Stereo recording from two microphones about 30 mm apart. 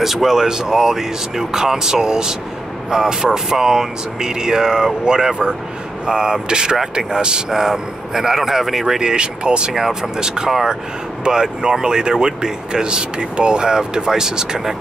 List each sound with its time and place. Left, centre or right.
0.0 s speech: centre
7.2 s speech: right
7.5 s speech: centre
9.0 s speech: right
9.8 s speech: centre